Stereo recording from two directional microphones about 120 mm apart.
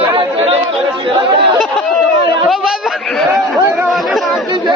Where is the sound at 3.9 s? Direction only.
Centre (ahead or behind).